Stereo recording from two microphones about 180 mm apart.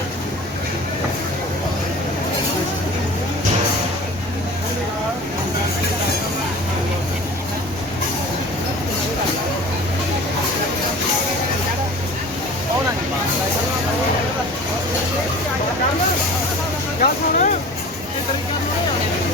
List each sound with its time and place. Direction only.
17.0 s vehicle: 45° left (ahead or behind)